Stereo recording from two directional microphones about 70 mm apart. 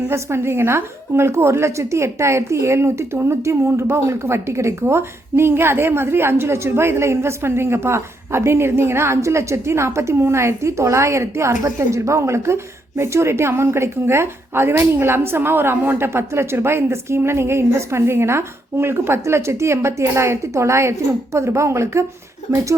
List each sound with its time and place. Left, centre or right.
0.1 s a woman's voice: right